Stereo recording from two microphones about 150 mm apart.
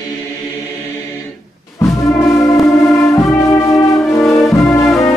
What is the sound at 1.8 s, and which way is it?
Music, 20° left (ahead or behind).